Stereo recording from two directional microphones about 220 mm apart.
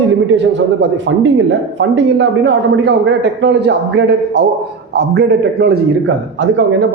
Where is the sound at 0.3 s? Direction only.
55° right (ahead or behind).